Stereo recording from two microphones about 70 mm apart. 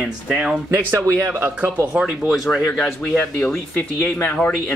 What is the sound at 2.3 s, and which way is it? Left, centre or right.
Speech, centre.